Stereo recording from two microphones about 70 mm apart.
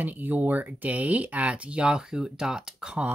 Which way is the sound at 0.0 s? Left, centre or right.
Right.